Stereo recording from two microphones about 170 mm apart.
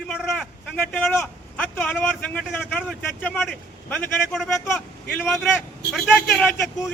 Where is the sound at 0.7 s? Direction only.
10° left (ahead or behind).